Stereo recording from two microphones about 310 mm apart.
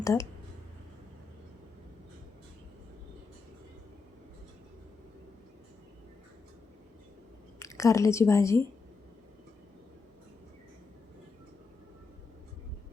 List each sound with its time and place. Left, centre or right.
0.0 s speech: centre
7.6 s a woman's voice: centre